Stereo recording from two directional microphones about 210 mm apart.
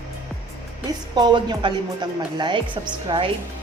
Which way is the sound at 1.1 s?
20° right (ahead or behind).